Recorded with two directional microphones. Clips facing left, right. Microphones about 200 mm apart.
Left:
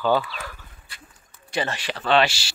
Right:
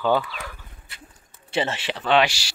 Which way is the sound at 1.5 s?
25° right (ahead or behind).